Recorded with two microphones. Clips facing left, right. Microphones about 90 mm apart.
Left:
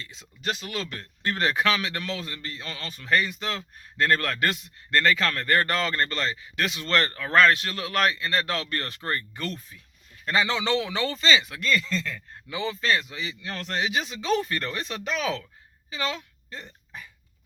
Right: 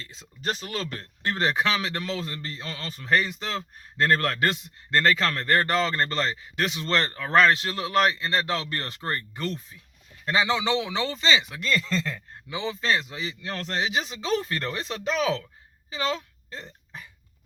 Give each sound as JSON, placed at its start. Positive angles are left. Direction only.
{"t": 0.0, "sound": "speech", "side_deg": -35}
{"t": 1.2, "sound": "a man's voice", "side_deg": -25}